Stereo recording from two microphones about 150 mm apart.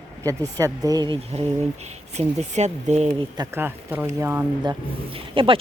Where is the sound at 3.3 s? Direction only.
25° right (ahead or behind).